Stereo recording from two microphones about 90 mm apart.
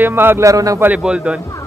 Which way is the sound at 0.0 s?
25° right (ahead or behind).